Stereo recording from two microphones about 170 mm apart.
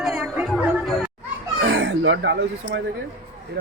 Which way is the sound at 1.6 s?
90° right.